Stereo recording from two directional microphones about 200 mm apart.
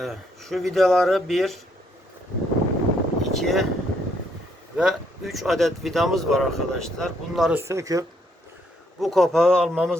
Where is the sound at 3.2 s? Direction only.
Centre (ahead or behind).